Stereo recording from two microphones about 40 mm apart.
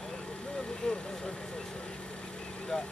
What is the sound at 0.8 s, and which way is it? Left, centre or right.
Vehicle, centre.